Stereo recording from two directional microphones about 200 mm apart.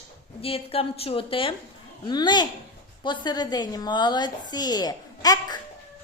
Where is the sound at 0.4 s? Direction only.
30° left (ahead or behind).